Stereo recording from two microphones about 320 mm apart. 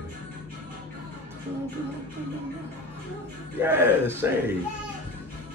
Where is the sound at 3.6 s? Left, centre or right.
Centre.